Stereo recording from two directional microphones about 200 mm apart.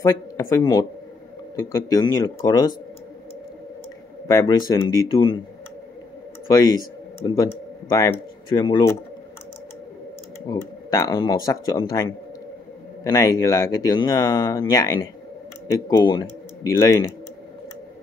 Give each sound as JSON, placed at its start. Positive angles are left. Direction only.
{"t": 0.0, "sound": "speech", "side_deg": 20}
{"t": 4.3, "sound": "speech", "side_deg": 15}
{"t": 6.4, "sound": "speech", "side_deg": 20}
{"t": 10.4, "sound": "speech", "side_deg": 15}